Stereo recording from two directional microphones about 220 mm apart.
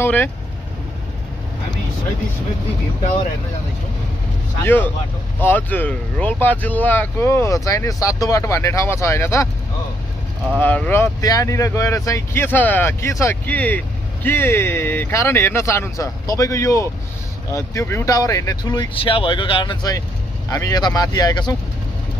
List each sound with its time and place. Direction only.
0.0 s speech: 10° left (ahead or behind)
4.6 s speech: 10° left (ahead or behind)
10.6 s speech: 5° left (ahead or behind)